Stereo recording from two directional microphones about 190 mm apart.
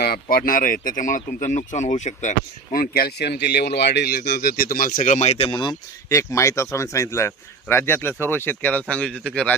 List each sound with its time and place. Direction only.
0.0 s speech: 50° left (ahead or behind)
2.7 s speech: 50° left (ahead or behind); by 9.6 s 5° left (ahead or behind)